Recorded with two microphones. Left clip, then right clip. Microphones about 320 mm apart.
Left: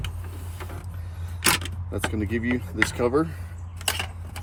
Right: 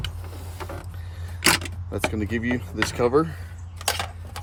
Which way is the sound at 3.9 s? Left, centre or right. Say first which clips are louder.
Right 1 dB; right.